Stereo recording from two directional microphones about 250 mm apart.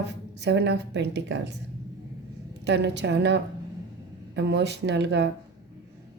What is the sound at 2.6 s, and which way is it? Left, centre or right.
A woman's voice, right.